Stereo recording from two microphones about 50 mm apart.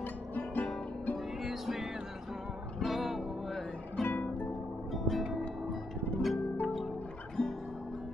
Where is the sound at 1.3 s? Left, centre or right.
Centre.